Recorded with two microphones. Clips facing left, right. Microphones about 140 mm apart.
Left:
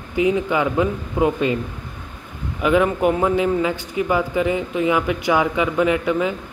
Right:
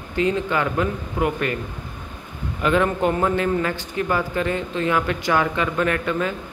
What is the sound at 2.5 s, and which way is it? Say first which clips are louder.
A man's voice: left 2 dB; 10° left (ahead or behind).